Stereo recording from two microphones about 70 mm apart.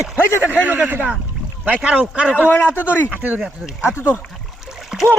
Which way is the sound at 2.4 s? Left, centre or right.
Left.